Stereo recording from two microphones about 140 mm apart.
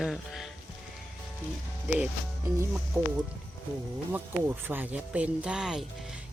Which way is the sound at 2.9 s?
15° right (ahead or behind).